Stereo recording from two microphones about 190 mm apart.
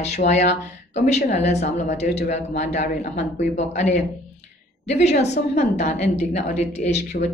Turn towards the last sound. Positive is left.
turn(degrees=35)  # may be behind; listen again after turning